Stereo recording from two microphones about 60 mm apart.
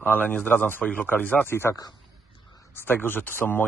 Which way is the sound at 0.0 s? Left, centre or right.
Left.